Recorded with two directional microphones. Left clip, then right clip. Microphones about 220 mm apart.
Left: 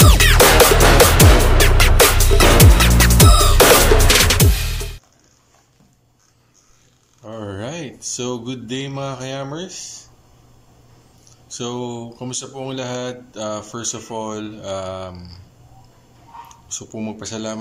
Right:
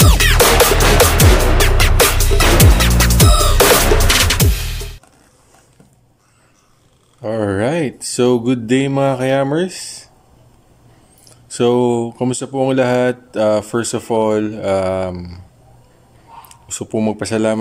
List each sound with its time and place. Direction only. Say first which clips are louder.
0.0 s music: even; centre (ahead or behind)
7.2 s speech: right 12 dB; 40° right (ahead or behind)
11.5 s speech: right 13 dB; 35° right (ahead or behind)
16.7 s speech: right 10 dB; 35° right (ahead or behind)